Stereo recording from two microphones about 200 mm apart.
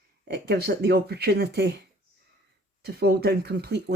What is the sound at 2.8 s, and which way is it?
Speech, 55° right (ahead or behind).